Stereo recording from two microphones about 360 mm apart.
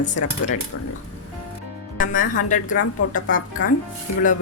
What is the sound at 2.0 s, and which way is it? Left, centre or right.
Speech, left.